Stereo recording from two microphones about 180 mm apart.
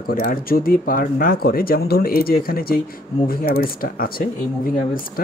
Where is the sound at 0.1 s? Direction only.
55° left (ahead or behind).